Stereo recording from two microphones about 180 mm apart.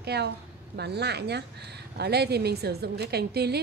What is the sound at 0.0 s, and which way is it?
A woman's voice, 65° right (ahead or behind).